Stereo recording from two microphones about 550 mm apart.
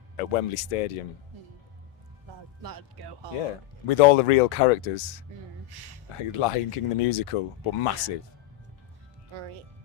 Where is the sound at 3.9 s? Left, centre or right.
Left.